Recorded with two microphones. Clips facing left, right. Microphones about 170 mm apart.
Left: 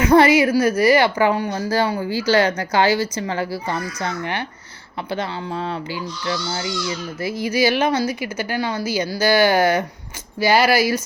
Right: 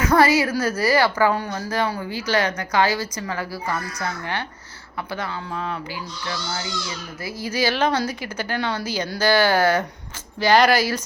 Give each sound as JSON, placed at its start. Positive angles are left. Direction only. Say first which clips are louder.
{"t": 0.0, "sound": "speech", "louder": "left 4 dB", "side_deg": 20}
{"t": 7.2, "sound": "a woman's voice", "louder": "left 5 dB", "side_deg": 20}